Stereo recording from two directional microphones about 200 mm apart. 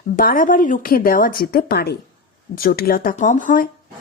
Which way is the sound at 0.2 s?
45° left (ahead or behind).